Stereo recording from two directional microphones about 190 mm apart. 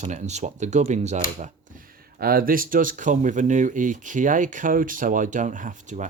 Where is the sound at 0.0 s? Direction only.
35° right (ahead or behind).